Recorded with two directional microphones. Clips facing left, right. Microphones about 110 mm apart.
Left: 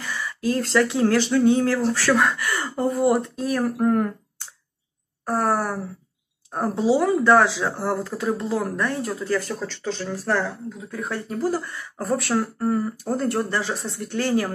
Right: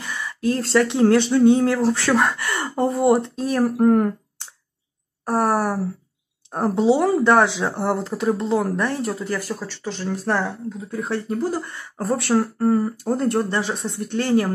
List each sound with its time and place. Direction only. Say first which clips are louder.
0.0 s a sound: right 2 dB; 20° right (ahead or behind)
0.8 s speech: right 4 dB; 25° right (ahead or behind)
5.2 s speech: right 2 dB; 25° right (ahead or behind)